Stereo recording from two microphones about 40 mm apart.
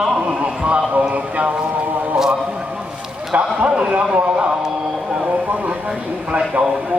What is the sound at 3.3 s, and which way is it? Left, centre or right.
Speech, right.